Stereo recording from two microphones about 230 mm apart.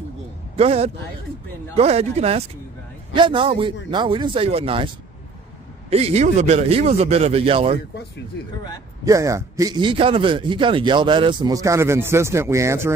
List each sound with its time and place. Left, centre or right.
0.6 s a man's voice: right
5.9 s a man's voice: right
9.0 s a man's voice: centre